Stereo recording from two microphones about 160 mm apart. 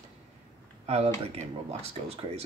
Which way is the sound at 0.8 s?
40° right (ahead or behind).